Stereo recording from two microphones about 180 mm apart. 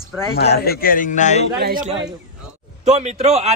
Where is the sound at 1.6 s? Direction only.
55° right (ahead or behind).